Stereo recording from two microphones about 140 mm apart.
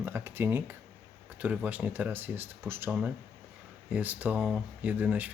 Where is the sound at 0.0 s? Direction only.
15° right (ahead or behind).